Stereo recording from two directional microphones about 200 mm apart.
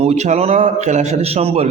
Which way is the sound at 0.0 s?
35° right (ahead or behind).